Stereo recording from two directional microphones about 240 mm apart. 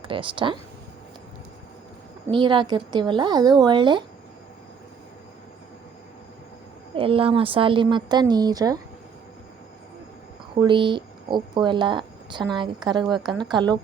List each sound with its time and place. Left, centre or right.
0.0 s speech: right
2.3 s speech: centre
6.9 s speech: right
10.5 s speech: centre